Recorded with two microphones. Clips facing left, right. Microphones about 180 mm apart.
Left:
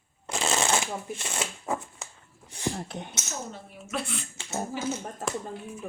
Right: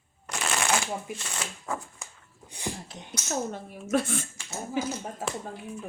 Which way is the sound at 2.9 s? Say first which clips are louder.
Left 7 dB; 60° left (ahead or behind).